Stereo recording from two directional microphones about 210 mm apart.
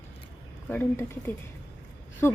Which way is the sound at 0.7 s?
10° left (ahead or behind).